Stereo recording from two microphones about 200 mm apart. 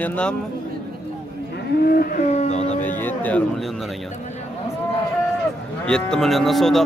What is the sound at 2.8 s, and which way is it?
Speech, 10° left (ahead or behind).